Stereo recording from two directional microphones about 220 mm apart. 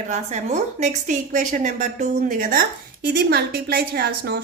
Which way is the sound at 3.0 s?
50° right (ahead or behind).